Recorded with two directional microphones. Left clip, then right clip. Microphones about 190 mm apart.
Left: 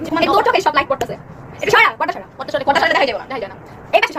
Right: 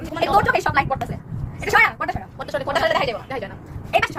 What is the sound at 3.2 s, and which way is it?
Speech, 25° right (ahead or behind).